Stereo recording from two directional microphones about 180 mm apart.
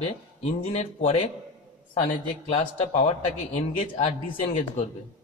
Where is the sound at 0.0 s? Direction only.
35° left (ahead or behind).